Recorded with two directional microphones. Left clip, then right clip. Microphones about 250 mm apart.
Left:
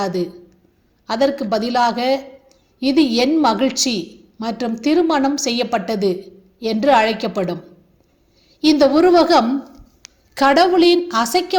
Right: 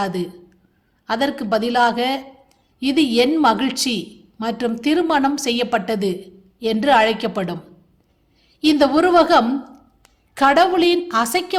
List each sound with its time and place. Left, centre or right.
0.0 s a woman's voice: centre
8.6 s a woman's voice: centre